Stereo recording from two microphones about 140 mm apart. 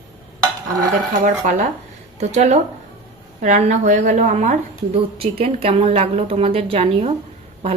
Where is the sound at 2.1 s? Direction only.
50° right (ahead or behind).